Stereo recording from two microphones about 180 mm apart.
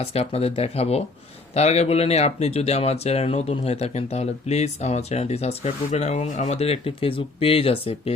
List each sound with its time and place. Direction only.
0.0 s speech: 35° left (ahead or behind)